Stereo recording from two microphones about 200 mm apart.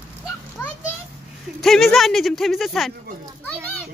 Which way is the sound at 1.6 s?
Centre (ahead or behind).